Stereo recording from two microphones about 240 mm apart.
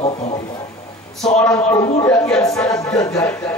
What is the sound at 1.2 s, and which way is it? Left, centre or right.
A man's voice, centre.